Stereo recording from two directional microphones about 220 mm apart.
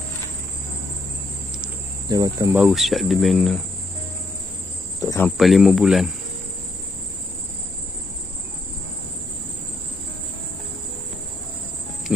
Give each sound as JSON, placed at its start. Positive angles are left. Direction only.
{"t": 2.0, "sound": "cricket", "side_deg": -15}
{"t": 2.6, "sound": "cricket", "side_deg": 0}
{"t": 5.0, "sound": "speech", "side_deg": 10}
{"t": 5.4, "sound": "cricket", "side_deg": 0}